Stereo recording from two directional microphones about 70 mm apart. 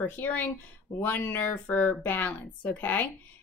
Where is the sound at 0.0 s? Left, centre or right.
Left.